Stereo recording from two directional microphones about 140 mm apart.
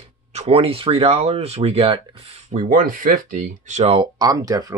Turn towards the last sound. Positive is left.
turn(degrees=-25)  # may be behind; listen again after turning